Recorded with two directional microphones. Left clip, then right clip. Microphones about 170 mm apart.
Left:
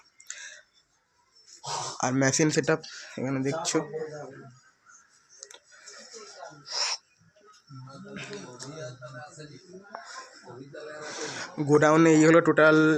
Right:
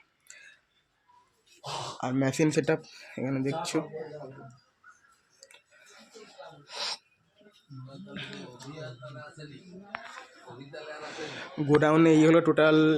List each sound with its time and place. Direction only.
0.3 s tick-tock: 10° right (ahead or behind)
2.0 s speech: 5° left (ahead or behind)
2.3 s speech: 10° right (ahead or behind)
5.4 s music: 5° right (ahead or behind)
6.7 s a sound: 20° right (ahead or behind)
8.1 s speech: 20° right (ahead or behind)
11.2 s speech: 10° right (ahead or behind)